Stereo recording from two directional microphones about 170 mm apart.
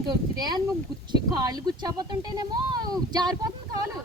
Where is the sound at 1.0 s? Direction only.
25° right (ahead or behind).